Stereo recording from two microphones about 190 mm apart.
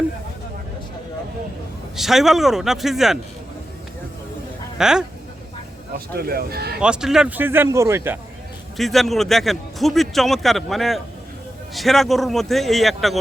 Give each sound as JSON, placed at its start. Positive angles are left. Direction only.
{"t": 2.0, "sound": "a man's voice", "side_deg": 0}
{"t": 4.8, "sound": "a man's voice", "side_deg": -5}
{"t": 6.1, "sound": "speech", "side_deg": -55}
{"t": 6.7, "sound": "speech", "side_deg": -5}
{"t": 8.8, "sound": "a man's voice", "side_deg": 0}